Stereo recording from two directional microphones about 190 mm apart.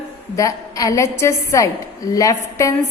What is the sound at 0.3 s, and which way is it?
A woman's voice, 15° left (ahead or behind).